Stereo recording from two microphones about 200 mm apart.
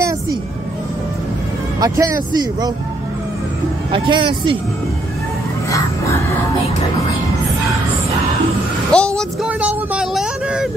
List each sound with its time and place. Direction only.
1.8 s speech: 15° right (ahead or behind)
3.9 s speech: 25° right (ahead or behind)
8.9 s speech: 5° left (ahead or behind)
9.5 s vehicle: 5° right (ahead or behind)